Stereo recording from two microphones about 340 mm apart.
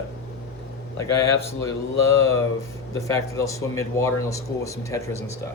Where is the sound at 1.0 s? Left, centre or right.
Centre.